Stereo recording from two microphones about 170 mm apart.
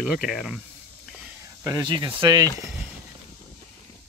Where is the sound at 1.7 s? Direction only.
25° right (ahead or behind).